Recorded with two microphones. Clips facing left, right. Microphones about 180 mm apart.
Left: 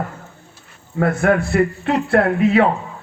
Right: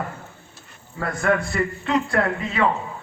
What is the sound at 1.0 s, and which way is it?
A man's voice, 55° left (ahead or behind).